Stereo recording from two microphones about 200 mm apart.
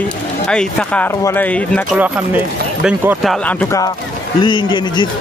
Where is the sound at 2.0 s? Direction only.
5° right (ahead or behind).